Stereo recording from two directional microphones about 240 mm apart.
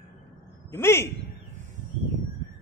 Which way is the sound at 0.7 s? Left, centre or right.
Centre.